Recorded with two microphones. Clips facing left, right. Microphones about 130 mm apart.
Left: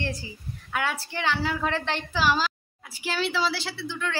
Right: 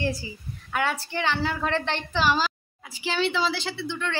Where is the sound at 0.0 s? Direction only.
5° right (ahead or behind).